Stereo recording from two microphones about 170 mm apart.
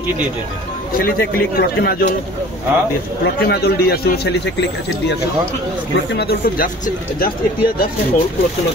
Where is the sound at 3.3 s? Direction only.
70° left (ahead or behind).